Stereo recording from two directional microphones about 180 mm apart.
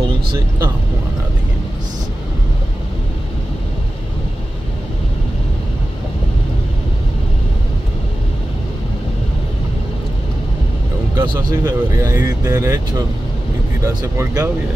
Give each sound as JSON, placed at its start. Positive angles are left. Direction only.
{"t": 11.1, "sound": "speech", "side_deg": -15}